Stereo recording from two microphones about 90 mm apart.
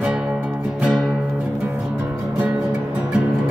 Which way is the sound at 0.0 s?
10° right (ahead or behind).